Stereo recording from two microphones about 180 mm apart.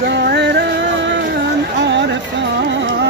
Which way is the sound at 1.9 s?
75° right (ahead or behind).